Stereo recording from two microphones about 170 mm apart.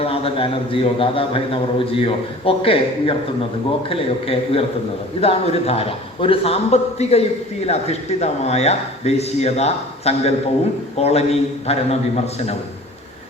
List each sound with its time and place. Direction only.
0.0 s speech: 35° left (ahead or behind)